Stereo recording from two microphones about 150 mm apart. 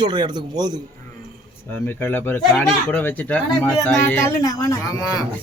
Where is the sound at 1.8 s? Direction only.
10° left (ahead or behind).